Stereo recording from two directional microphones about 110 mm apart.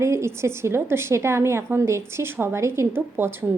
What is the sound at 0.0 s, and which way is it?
A woman's voice, 25° right (ahead or behind).